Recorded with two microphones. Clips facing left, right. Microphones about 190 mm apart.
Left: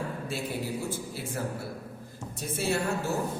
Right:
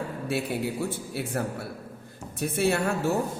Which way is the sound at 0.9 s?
65° right (ahead or behind).